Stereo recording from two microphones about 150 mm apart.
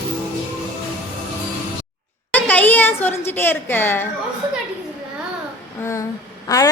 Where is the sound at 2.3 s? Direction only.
10° left (ahead or behind).